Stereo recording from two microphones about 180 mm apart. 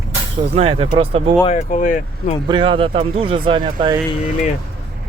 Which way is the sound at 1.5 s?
40° left (ahead or behind).